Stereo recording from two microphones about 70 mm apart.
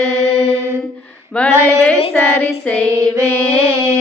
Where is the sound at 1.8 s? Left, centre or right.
Centre.